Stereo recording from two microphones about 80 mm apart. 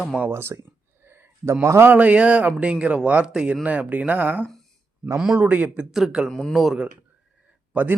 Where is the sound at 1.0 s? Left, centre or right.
Right.